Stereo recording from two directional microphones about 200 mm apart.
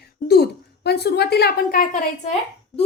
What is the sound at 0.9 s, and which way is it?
A woman's voice, 55° left (ahead or behind).